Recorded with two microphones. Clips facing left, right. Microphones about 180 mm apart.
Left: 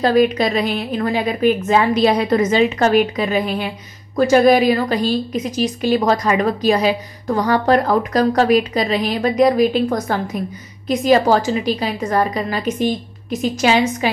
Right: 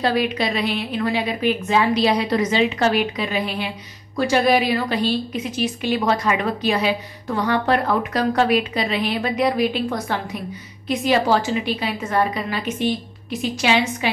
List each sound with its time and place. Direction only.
0.0 s a woman's voice: 45° left (ahead or behind)